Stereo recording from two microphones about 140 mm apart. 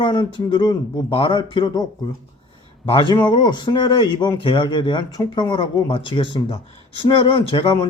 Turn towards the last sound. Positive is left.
turn(degrees=40)  # may be behind; listen again after turning